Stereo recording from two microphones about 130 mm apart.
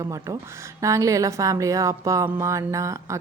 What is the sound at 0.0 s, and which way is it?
A woman's voice, 25° right (ahead or behind).